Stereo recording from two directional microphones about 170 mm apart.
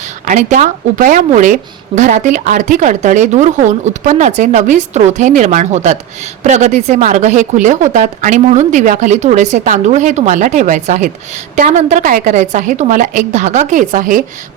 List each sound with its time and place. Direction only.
0.3 s speech: 45° right (ahead or behind)